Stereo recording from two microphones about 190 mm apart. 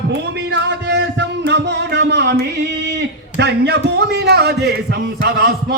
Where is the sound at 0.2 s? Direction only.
65° right (ahead or behind).